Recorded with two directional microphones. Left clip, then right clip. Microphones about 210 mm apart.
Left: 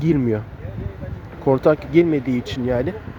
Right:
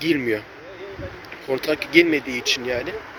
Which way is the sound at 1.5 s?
15° left (ahead or behind).